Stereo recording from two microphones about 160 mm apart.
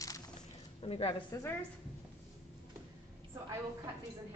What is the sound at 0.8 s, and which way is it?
Speech, 35° left (ahead or behind).